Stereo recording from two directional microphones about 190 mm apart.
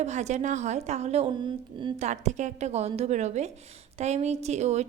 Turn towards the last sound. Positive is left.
turn(degrees=-35)  # may be behind; listen again after turning